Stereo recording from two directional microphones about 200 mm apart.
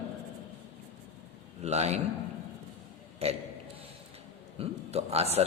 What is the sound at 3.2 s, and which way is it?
Speech, 30° right (ahead or behind).